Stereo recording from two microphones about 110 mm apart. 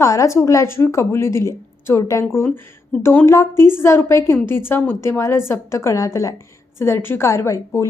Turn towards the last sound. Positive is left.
turn(degrees=25)  # may be behind; listen again after turning